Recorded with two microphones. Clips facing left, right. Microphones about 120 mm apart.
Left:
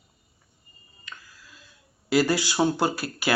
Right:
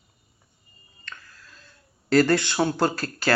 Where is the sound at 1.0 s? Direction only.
5° left (ahead or behind).